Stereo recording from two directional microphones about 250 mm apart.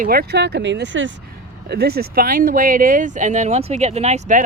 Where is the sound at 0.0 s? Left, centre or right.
Right.